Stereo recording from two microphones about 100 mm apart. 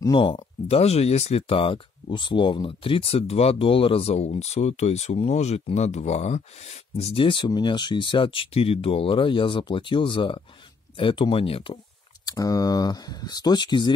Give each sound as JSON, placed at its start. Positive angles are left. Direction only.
{"t": 0.1, "sound": "speech", "side_deg": 55}
{"t": 12.3, "sound": "speech", "side_deg": 40}